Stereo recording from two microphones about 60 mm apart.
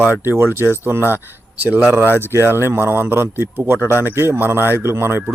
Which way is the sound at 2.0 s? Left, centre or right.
Left.